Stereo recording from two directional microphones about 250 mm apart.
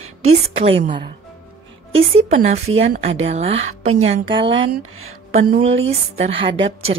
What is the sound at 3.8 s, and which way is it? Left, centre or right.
Speech, right.